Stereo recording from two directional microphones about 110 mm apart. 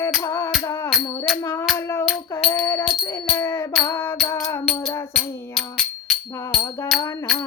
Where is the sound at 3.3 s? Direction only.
25° left (ahead or behind).